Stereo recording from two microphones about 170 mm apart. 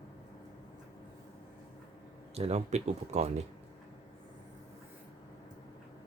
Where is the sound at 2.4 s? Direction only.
40° right (ahead or behind).